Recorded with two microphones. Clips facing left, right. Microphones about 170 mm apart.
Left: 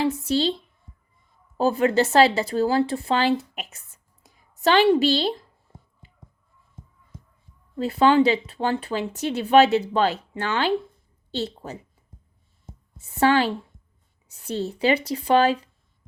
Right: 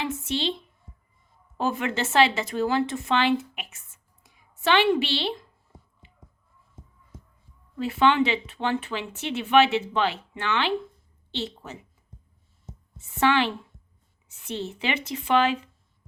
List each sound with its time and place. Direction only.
0.0 s speech: 35° left (ahead or behind)
1.5 s speech: 35° left (ahead or behind)
7.8 s speech: 35° left (ahead or behind)
13.0 s speech: 35° left (ahead or behind)